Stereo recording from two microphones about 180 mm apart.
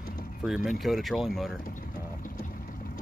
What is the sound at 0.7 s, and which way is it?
Speech, centre (ahead or behind).